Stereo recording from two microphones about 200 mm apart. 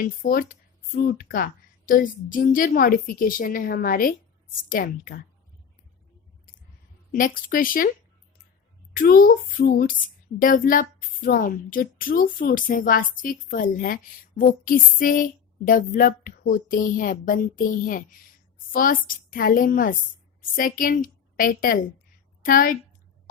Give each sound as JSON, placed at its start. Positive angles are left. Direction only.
{"t": 0.0, "sound": "a woman's voice", "side_deg": 45}
{"t": 7.1, "sound": "a woman's voice", "side_deg": 45}
{"t": 8.9, "sound": "a woman's voice", "side_deg": 45}